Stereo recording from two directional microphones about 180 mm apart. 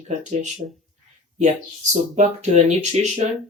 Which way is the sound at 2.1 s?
40° right (ahead or behind).